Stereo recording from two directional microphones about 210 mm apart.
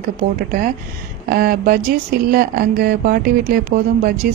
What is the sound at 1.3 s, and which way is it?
Speech, 45° right (ahead or behind).